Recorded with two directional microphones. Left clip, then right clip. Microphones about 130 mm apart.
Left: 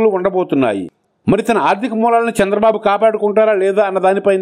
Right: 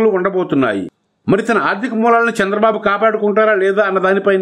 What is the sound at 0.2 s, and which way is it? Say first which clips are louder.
A man's voice: left 1 dB; 25° left (ahead or behind).